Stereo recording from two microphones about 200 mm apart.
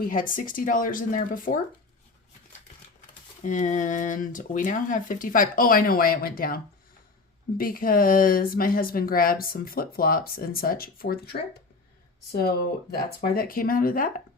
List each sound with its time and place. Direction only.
0.1 s speech: 40° left (ahead or behind)
3.4 s speech: 40° left (ahead or behind)
7.6 s speech: 45° left (ahead or behind)
12.9 s speech: 45° left (ahead or behind)